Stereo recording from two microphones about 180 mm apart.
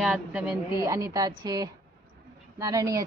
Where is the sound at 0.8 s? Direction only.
20° right (ahead or behind).